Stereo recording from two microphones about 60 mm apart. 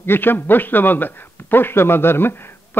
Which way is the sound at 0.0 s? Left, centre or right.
Left.